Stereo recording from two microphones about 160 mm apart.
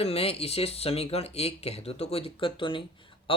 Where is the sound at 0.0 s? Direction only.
35° left (ahead or behind).